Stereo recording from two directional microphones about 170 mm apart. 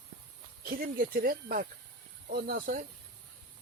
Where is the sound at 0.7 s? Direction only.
55° right (ahead or behind).